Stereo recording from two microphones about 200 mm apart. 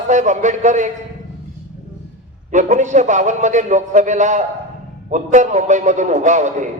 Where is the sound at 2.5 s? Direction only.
40° right (ahead or behind).